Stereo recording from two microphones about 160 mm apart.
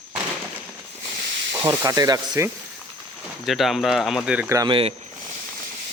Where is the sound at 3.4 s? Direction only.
Centre (ahead or behind).